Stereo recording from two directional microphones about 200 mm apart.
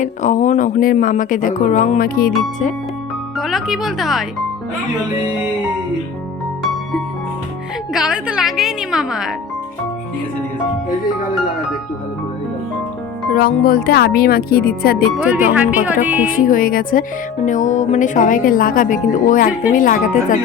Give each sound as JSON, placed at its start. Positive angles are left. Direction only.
{"t": 0.0, "sound": "music", "side_deg": 40}
{"t": 3.3, "sound": "speech", "side_deg": 0}
{"t": 7.9, "sound": "speech", "side_deg": -5}
{"t": 13.3, "sound": "speech", "side_deg": 45}
{"t": 15.2, "sound": "speech", "side_deg": -10}
{"t": 16.2, "sound": "music", "side_deg": 45}